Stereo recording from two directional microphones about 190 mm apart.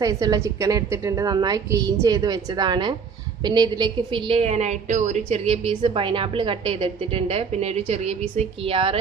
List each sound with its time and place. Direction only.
0.0 s a woman's voice: 20° right (ahead or behind)